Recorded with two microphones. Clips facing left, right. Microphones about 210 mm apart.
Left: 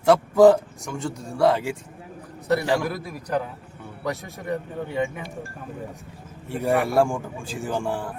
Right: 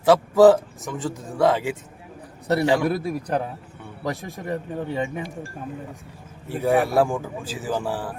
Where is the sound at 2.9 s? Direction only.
30° right (ahead or behind).